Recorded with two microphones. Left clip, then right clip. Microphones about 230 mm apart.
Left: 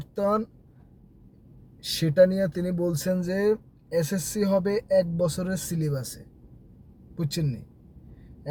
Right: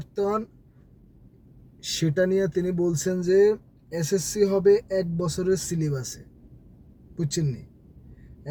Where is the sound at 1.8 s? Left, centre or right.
Centre.